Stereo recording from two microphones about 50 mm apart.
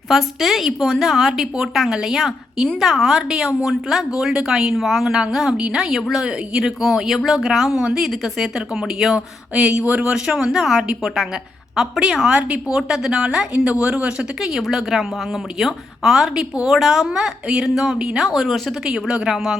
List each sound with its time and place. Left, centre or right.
0.1 s a woman's voice: centre; by 10.3 s right
10.3 s speech: centre
12.4 s speech: right
14.7 s a woman's voice: centre